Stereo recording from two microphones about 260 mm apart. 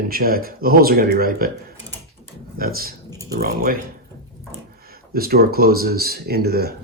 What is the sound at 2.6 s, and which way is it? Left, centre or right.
Speech, right.